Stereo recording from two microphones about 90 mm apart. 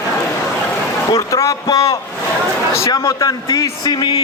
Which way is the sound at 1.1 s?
40° left (ahead or behind).